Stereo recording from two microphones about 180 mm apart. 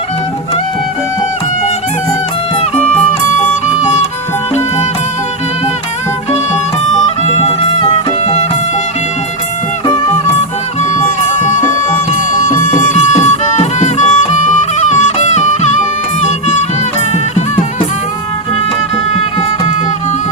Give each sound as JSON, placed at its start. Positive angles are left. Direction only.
{"t": 7.3, "sound": "music", "side_deg": 30}
{"t": 12.4, "sound": "music", "side_deg": 45}